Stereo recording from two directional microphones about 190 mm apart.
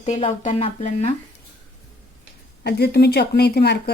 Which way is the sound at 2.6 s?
60° left (ahead or behind).